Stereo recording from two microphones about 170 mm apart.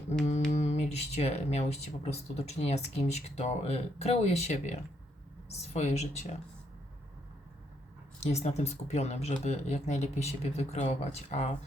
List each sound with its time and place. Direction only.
0.5 s speech: 40° left (ahead or behind)
8.2 s speech: 40° left (ahead or behind)